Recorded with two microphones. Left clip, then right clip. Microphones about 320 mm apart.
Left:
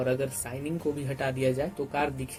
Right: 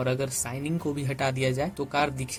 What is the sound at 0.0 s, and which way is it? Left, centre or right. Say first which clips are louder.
Speech: even; right.